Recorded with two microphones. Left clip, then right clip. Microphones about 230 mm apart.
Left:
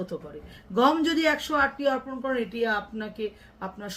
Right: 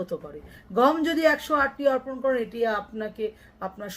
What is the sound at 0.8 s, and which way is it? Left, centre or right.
Speech, centre.